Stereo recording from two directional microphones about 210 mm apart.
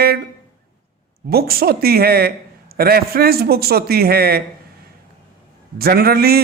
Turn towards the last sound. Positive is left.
turn(degrees=-45)  # may be behind; listen again after turning